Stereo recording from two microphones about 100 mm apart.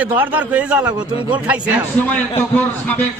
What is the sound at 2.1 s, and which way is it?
Speech, 15° left (ahead or behind).